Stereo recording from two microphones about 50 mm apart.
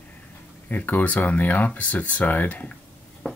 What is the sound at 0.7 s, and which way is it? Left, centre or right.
Speech, left.